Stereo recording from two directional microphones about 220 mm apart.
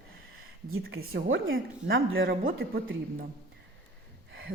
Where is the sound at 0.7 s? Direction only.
70° right (ahead or behind).